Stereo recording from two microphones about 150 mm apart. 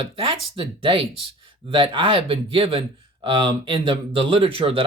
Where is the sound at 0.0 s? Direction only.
35° right (ahead or behind).